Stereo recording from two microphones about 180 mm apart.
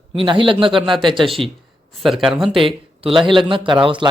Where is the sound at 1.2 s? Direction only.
Centre (ahead or behind).